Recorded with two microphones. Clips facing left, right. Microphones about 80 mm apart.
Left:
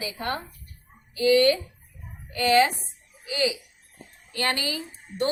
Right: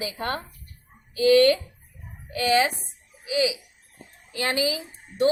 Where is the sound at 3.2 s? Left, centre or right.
Centre.